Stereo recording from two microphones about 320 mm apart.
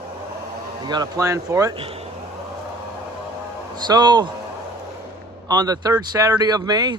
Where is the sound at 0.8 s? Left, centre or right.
Centre.